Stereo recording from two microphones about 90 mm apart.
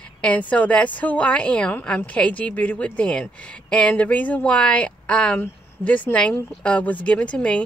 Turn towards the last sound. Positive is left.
turn(degrees=15)  # may be behind; listen again after turning